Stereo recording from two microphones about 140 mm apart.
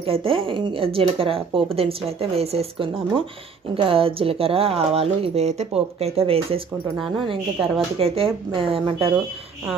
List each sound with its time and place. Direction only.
0.0 s a woman's voice: 40° right (ahead or behind)
8.0 s speech: 40° right (ahead or behind)